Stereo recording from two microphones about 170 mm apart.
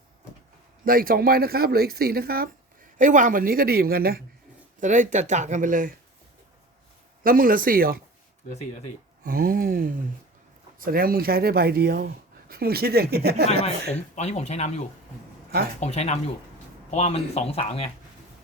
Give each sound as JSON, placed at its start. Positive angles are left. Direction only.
{"t": 0.9, "sound": "speech", "side_deg": -60}
{"t": 3.0, "sound": "speech", "side_deg": -50}
{"t": 4.8, "sound": "speech", "side_deg": -45}
{"t": 7.3, "sound": "speech", "side_deg": -55}
{"t": 9.2, "sound": "speech", "side_deg": -60}
{"t": 14.2, "sound": "speech", "side_deg": 40}